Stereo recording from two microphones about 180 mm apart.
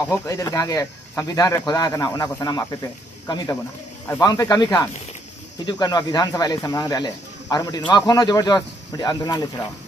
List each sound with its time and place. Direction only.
0.1 s speech: 15° left (ahead or behind)